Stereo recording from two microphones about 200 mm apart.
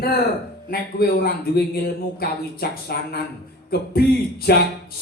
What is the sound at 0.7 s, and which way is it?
A man's voice, 50° left (ahead or behind).